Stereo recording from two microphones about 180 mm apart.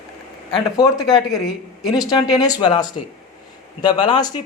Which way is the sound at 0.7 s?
20° left (ahead or behind).